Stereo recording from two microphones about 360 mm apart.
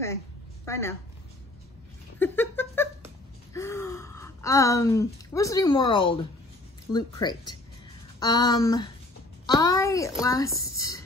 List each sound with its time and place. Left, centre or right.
0.7 s a woman's voice: centre
2.1 s a sound: centre
3.5 s a woman's voice: centre